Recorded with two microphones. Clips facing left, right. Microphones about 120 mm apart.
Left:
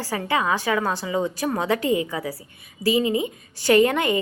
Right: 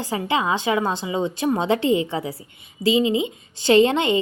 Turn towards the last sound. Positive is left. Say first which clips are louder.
# right 2 dB
turn(degrees=-25)  # may be behind; listen again after turning